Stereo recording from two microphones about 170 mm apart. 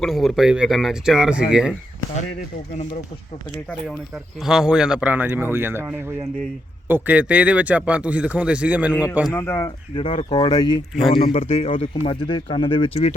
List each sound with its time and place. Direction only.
0.0 s speech: centre (ahead or behind)
4.4 s speech: 5° right (ahead or behind)
9.3 s speech: 15° left (ahead or behind)
9.9 s speech: 30° left (ahead or behind)